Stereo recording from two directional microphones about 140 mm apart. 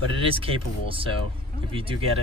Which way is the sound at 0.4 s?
40° right (ahead or behind).